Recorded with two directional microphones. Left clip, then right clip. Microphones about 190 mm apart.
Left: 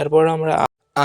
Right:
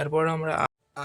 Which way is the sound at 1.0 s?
50° left (ahead or behind).